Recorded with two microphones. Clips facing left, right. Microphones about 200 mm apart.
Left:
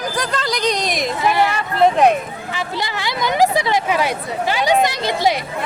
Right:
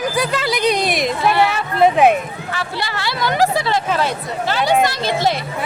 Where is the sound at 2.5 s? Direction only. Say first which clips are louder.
Left 1 dB; 15° left (ahead or behind).